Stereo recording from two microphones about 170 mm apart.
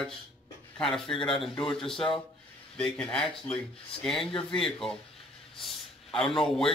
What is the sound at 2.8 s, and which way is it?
A man's voice, 5° left (ahead or behind).